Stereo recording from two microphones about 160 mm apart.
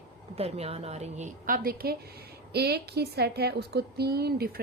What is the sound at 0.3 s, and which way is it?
A woman's voice, 40° right (ahead or behind).